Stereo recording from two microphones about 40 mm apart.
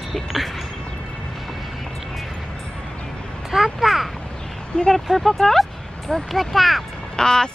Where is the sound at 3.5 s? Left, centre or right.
Centre.